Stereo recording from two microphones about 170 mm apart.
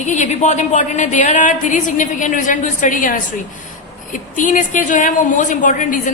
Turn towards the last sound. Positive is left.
turn(degrees=50)  # may be behind; listen again after turning